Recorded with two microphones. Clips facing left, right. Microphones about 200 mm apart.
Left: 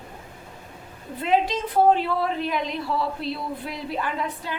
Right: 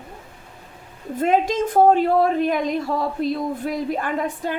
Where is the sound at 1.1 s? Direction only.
45° right (ahead or behind).